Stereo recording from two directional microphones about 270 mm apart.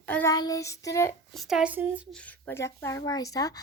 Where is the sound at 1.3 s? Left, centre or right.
Centre.